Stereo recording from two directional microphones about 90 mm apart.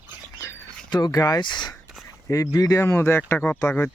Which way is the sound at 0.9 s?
50° left (ahead or behind).